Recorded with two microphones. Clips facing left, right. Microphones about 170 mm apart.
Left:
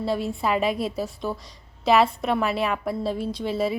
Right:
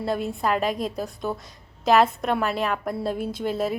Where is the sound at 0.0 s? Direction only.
Centre (ahead or behind).